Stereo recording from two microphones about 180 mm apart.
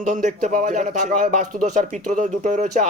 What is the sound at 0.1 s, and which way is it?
Speech, 45° right (ahead or behind).